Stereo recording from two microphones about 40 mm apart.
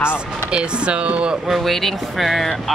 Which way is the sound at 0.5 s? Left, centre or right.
Right.